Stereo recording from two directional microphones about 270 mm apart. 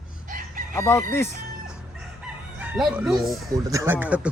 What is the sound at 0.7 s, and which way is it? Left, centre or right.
Crowing, centre.